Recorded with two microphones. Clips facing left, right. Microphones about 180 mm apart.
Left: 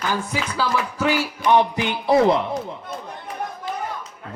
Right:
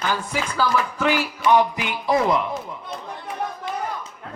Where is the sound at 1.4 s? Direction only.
25° left (ahead or behind).